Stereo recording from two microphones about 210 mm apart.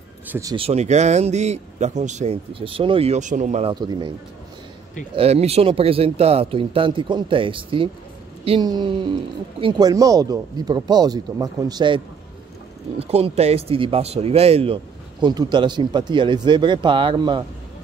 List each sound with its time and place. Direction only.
0.3 s speech: 15° right (ahead or behind)
0.6 s speech: 30° right (ahead or behind)
3.7 s speech: 20° right (ahead or behind)
5.1 s speech: 30° right (ahead or behind)
13.0 s speech: 30° right (ahead or behind)